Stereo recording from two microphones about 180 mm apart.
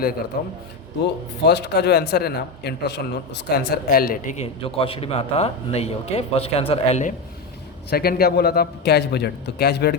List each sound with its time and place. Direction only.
0.3 s speech: 55° left (ahead or behind)
1.0 s speech: 65° left (ahead or behind); by 4.4 s 50° left (ahead or behind)
4.6 s a man's voice: 30° left (ahead or behind)
7.9 s speech: 60° left (ahead or behind)